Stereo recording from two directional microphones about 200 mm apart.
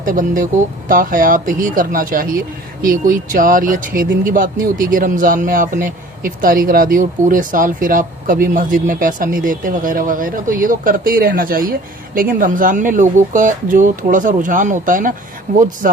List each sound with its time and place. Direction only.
0.0 s speech: 40° right (ahead or behind)